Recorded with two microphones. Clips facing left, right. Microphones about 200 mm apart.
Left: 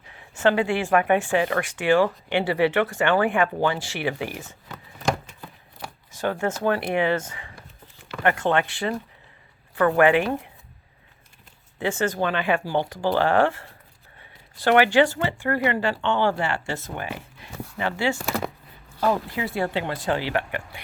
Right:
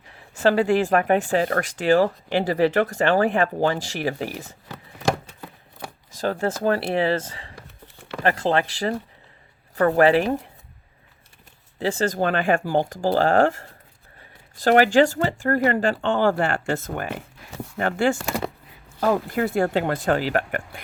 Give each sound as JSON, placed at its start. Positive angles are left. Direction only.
{"t": 0.4, "sound": "speech", "side_deg": -40}
{"t": 6.1, "sound": "speech", "side_deg": -35}
{"t": 11.8, "sound": "speech", "side_deg": -35}